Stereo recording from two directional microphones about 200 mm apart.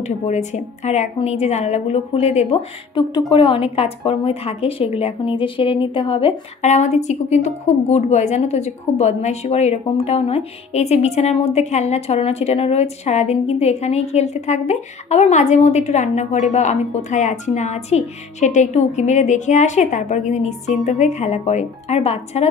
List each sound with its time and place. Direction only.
0.0 s a woman's voice: 35° left (ahead or behind)